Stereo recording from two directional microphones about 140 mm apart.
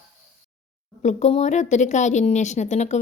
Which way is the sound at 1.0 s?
55° left (ahead or behind).